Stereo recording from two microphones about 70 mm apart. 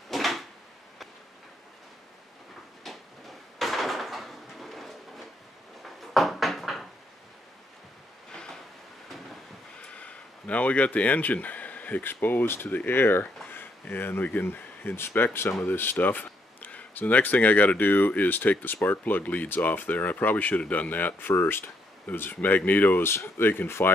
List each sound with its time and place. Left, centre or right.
0.1 s drawer open or close: centre
3.5 s a sound: centre
5.8 s cupboard open or close: centre
9.8 s speech: centre